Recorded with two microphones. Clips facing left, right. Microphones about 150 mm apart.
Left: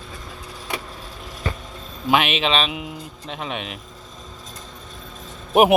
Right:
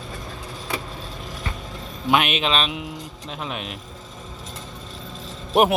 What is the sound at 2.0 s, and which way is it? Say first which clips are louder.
Speech: left 1 dB; centre (ahead or behind).